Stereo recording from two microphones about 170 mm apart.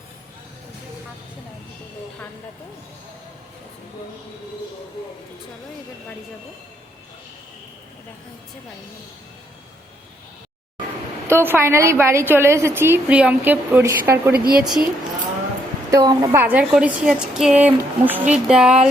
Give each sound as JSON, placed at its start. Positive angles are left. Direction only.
{"t": 11.3, "sound": "a woman's voice", "side_deg": -15}
{"t": 14.3, "sound": "a woman's voice", "side_deg": -60}
{"t": 14.6, "sound": "music", "side_deg": -5}
{"t": 15.9, "sound": "a woman's voice", "side_deg": -20}
{"t": 16.4, "sound": "a woman's voice", "side_deg": -10}
{"t": 18.4, "sound": "music", "side_deg": -5}